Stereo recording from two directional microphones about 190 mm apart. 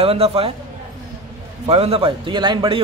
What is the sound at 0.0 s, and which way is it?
Speech, 30° right (ahead or behind).